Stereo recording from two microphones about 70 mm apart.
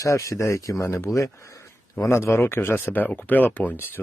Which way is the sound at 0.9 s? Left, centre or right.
Left.